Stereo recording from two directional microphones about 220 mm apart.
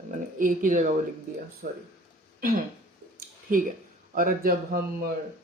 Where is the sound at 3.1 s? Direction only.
40° right (ahead or behind).